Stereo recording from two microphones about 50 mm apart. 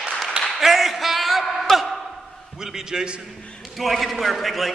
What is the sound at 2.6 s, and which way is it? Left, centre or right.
Speech, centre.